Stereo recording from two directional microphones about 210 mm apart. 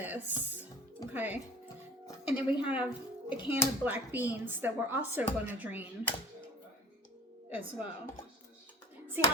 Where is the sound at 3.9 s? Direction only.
10° right (ahead or behind).